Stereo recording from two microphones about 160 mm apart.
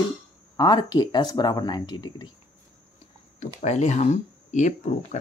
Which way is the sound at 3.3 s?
45° left (ahead or behind).